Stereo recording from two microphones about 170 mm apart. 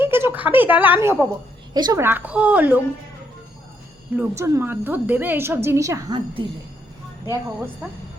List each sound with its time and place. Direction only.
0.0 s a woman's voice: 10° right (ahead or behind)
4.1 s a woman's voice: 15° right (ahead or behind)